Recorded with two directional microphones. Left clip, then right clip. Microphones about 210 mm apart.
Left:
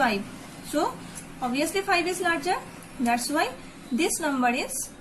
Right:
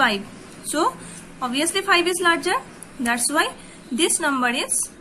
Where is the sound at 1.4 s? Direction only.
25° right (ahead or behind).